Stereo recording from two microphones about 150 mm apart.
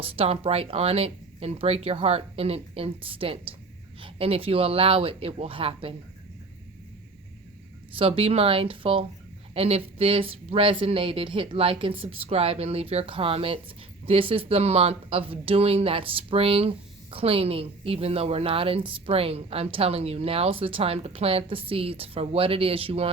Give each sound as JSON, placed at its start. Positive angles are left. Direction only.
{"t": 0.0, "sound": "speech", "side_deg": -40}
{"t": 7.9, "sound": "speech", "side_deg": -40}